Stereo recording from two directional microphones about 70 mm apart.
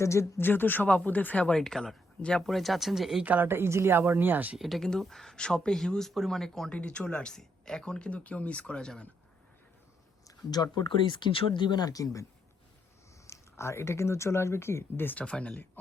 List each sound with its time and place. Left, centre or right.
0.0 s speech: left; by 1.5 s centre
1.5 s speech: centre
3.2 s speech: right
4.5 s speech: centre
10.5 s speech: left
13.3 s speech: left
15.2 s speech: centre